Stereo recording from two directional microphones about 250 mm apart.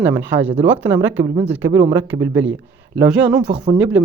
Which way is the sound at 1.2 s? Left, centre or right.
Centre.